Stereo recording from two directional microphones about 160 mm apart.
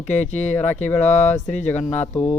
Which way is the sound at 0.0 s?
45° left (ahead or behind).